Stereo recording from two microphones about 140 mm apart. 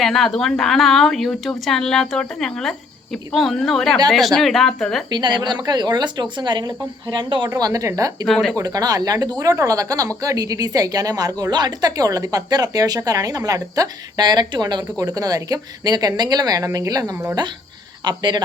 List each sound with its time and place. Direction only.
0.0 s speech: centre (ahead or behind)
5.1 s a woman's voice: 30° right (ahead or behind)
8.3 s speech: centre (ahead or behind)
8.5 s a woman's voice: 25° right (ahead or behind)